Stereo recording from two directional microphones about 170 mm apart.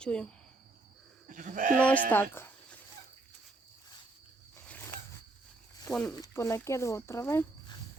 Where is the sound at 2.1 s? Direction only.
15° left (ahead or behind).